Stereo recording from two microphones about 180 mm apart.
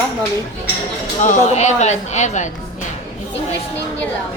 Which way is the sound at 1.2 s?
40° left (ahead or behind).